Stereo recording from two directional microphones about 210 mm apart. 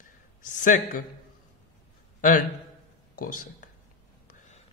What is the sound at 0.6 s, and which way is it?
Speech, 40° left (ahead or behind).